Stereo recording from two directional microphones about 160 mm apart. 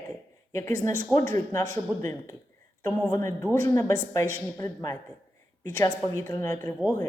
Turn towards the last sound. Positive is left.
turn(degrees=15)  # may be behind; listen again after turning